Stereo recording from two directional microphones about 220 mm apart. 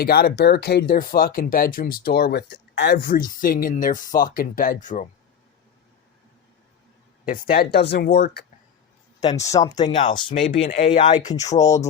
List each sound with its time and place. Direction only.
0.0 s speech: 45° left (ahead or behind)
7.3 s speech: 40° left (ahead or behind)
9.4 s speech: 15° left (ahead or behind)